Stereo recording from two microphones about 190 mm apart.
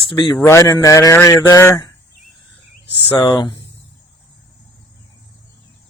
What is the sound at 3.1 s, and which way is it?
Speech, 20° left (ahead or behind).